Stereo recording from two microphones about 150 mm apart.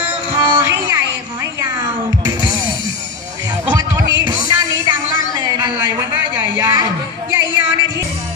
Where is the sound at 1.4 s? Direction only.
25° right (ahead or behind).